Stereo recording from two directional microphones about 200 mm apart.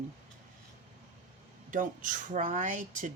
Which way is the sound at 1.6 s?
40° right (ahead or behind).